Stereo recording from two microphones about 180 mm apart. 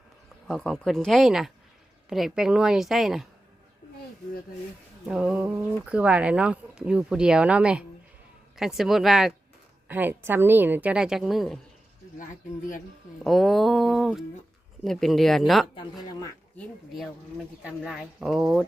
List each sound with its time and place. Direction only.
0.4 s a woman's voice: 5° left (ahead or behind)
5.0 s a woman's voice: 5° right (ahead or behind)
13.2 s a woman's voice: centre (ahead or behind)
15.7 s speech: 25° left (ahead or behind)
16.6 s a woman's voice: centre (ahead or behind)